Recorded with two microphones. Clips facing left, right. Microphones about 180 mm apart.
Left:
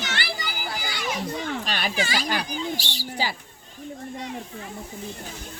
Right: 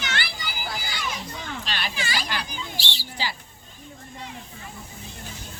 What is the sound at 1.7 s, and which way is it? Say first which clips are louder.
Speech: left 2 dB; 45° left (ahead or behind).